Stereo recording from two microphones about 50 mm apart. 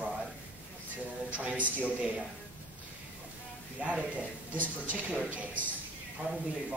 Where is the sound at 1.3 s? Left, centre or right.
Right.